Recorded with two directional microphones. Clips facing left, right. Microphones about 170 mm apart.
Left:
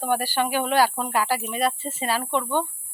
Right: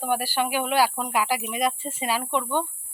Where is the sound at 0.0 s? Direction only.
10° right (ahead or behind).